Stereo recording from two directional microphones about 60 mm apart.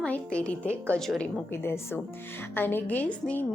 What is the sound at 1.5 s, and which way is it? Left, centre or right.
A woman's voice, left.